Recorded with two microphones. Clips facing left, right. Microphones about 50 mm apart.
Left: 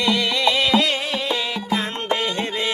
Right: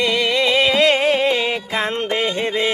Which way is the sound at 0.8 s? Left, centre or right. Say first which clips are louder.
Right 8 dB; right.